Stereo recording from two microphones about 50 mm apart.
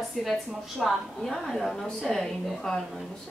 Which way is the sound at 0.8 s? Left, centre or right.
Centre.